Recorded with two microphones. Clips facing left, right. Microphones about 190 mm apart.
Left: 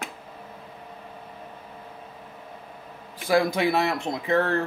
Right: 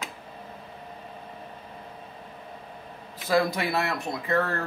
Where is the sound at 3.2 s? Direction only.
15° left (ahead or behind).